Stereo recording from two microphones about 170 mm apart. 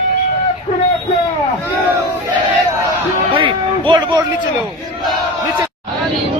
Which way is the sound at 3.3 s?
30° right (ahead or behind).